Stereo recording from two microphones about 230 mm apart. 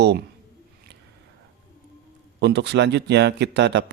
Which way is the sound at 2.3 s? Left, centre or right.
Right.